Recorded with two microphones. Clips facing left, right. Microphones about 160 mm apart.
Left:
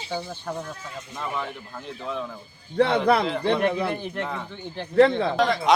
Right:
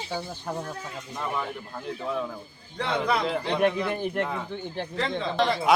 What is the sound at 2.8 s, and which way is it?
Speech, 55° left (ahead or behind).